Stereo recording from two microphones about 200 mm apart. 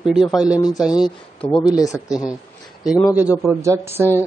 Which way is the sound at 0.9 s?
20° left (ahead or behind).